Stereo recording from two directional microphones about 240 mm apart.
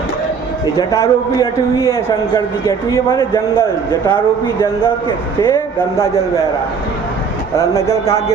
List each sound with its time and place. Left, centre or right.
0.8 s a man's voice: centre
5.5 s a man's voice: centre
7.5 s a man's voice: centre